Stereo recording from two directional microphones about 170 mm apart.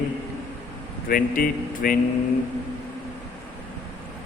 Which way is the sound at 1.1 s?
55° left (ahead or behind).